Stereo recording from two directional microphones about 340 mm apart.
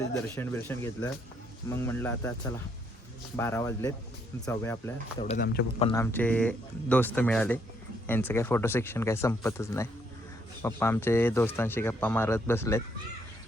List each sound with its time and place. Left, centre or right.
0.3 s speech: centre
3.3 s speech: centre
5.2 s a man's voice: left
5.9 s speech: centre